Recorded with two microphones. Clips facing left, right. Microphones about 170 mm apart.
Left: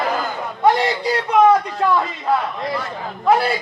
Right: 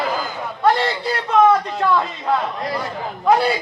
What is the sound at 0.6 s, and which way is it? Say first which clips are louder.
A man's voice: left 1 dB; 15° left (ahead or behind).